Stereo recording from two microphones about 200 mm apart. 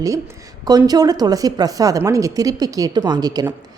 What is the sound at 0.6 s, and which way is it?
A woman's voice, 20° right (ahead or behind).